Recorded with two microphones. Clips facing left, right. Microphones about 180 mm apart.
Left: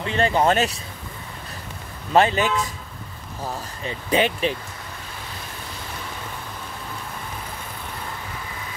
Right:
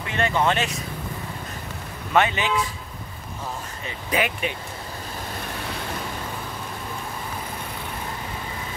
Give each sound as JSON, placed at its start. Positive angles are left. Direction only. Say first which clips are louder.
{"t": 0.0, "sound": "speech", "louder": "left 3 dB", "side_deg": 30}
{"t": 2.1, "sound": "speech", "louder": "left 3 dB", "side_deg": 40}
{"t": 3.8, "sound": "speech", "louder": "left 4 dB", "side_deg": 30}